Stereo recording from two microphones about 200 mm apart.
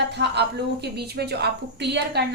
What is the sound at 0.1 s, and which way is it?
A woman's voice, 55° right (ahead or behind).